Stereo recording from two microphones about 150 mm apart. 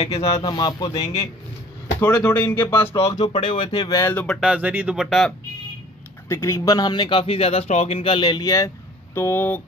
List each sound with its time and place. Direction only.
0.1 s speech: 25° left (ahead or behind)
2.0 s speech: 10° left (ahead or behind)
3.3 s speech: 35° left (ahead or behind)
4.0 s speech: 10° left (ahead or behind)
4.4 s speech: 5° right (ahead or behind)
6.2 s speech: 20° left (ahead or behind)